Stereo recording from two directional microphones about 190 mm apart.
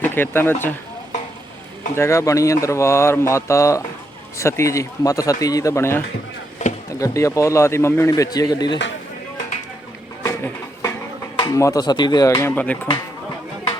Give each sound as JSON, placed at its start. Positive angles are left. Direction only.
{"t": 0.0, "sound": "speech", "side_deg": 10}
{"t": 2.0, "sound": "speech", "side_deg": 15}
{"t": 6.6, "sound": "chop", "side_deg": 40}
{"t": 7.0, "sound": "speech", "side_deg": 15}
{"t": 10.2, "sound": "a sound", "side_deg": 15}
{"t": 11.3, "sound": "speech", "side_deg": 20}